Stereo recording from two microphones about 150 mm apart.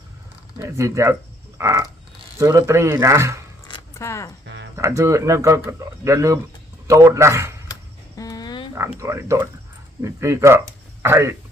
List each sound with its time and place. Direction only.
0.6 s speech: 20° right (ahead or behind)
1.5 s a sound: 20° right (ahead or behind)
2.4 s speech: 20° right (ahead or behind)
3.9 s speech: 20° left (ahead or behind)
4.8 s speech: 20° right (ahead or behind)
7.7 s music: 25° left (ahead or behind)
9.0 s speech: 20° right (ahead or behind)